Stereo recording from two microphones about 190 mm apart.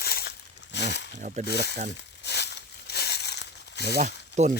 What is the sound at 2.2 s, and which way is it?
Crumpling, 60° left (ahead or behind).